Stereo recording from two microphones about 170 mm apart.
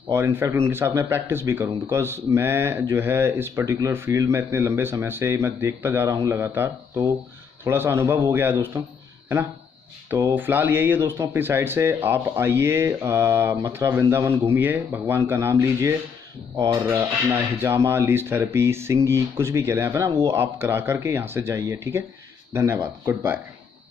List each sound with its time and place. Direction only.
0.1 s speech: 15° right (ahead or behind)
10.0 s speech: 10° right (ahead or behind)